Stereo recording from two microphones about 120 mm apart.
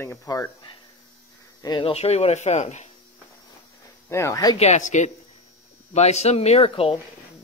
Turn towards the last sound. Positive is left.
turn(degrees=50)  # may be behind; listen again after turning